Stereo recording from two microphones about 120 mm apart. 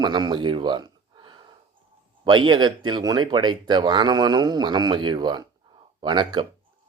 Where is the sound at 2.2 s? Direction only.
40° right (ahead or behind).